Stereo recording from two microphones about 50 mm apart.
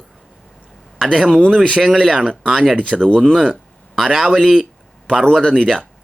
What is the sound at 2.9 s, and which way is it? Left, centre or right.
Speech, centre.